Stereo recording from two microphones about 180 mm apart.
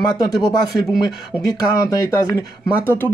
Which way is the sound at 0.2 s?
20° left (ahead or behind).